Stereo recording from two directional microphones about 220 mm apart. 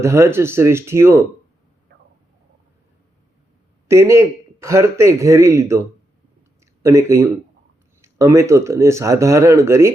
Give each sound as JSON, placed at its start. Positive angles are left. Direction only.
{"t": 0.0, "sound": "a man's voice", "side_deg": -10}
{"t": 3.8, "sound": "a man's voice", "side_deg": -15}
{"t": 6.8, "sound": "a man's voice", "side_deg": -10}